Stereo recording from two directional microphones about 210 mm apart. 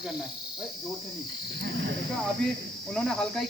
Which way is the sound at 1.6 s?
60° right (ahead or behind).